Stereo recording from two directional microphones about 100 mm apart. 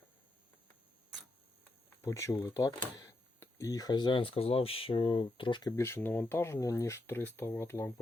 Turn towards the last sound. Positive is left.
turn(degrees=25)  # may be behind; listen again after turning